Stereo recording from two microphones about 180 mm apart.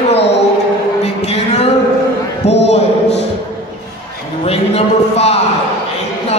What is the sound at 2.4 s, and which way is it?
Speech, 35° left (ahead or behind).